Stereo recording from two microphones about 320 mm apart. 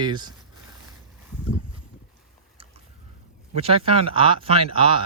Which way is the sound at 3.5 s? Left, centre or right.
Centre.